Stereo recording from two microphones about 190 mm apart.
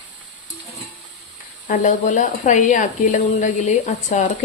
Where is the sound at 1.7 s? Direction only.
40° left (ahead or behind).